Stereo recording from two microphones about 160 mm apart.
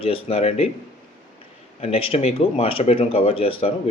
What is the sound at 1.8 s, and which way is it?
Speech, 35° left (ahead or behind).